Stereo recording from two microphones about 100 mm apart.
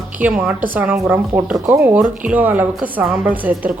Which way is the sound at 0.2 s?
10° right (ahead or behind).